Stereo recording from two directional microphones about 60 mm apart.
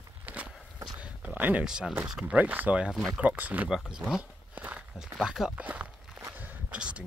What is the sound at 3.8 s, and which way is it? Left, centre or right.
Speech, centre.